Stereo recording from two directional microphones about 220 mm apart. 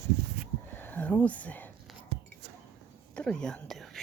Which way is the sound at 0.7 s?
10° left (ahead or behind).